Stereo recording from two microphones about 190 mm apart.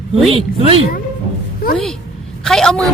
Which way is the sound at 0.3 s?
30° right (ahead or behind).